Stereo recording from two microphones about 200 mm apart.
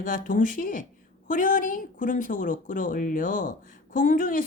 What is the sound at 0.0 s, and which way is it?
A woman's voice, 40° left (ahead or behind).